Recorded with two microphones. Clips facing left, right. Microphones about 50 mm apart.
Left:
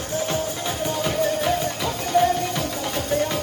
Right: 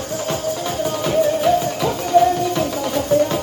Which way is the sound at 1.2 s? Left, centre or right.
Left.